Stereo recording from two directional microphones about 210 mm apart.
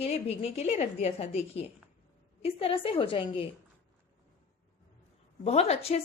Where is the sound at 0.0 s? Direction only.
30° left (ahead or behind).